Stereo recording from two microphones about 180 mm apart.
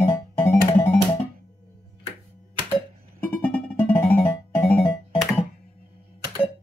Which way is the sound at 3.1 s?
10° left (ahead or behind).